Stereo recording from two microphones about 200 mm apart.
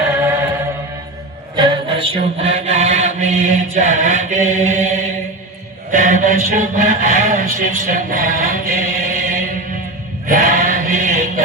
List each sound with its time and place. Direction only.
1.5 s chant: 25° right (ahead or behind)
5.9 s speech: 40° right (ahead or behind)
10.2 s chant: 45° right (ahead or behind)